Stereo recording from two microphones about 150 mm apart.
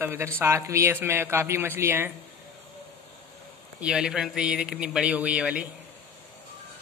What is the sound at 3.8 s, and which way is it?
Speech, 5° right (ahead or behind).